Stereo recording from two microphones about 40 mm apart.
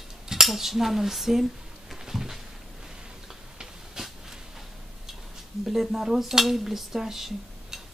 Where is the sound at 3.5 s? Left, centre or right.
Centre.